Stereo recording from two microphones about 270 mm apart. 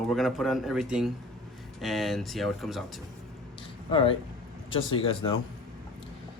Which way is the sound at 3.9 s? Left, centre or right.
Centre.